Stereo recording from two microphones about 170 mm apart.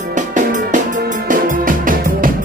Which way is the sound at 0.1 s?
50° right (ahead or behind).